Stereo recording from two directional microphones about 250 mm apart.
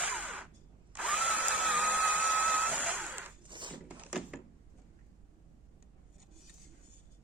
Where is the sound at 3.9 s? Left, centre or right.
Centre.